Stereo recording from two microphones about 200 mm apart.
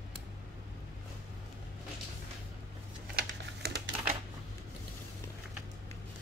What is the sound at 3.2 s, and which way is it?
Typing, 55° right (ahead or behind).